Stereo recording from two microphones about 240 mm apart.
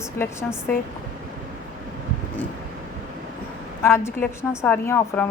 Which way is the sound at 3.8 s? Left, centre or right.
Centre.